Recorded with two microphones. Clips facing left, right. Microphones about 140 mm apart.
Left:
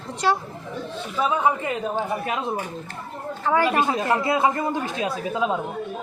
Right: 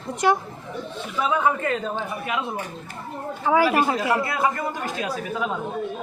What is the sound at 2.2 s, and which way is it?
Speech, 35° left (ahead or behind).